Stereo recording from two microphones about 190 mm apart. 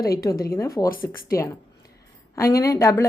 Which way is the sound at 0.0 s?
50° left (ahead or behind).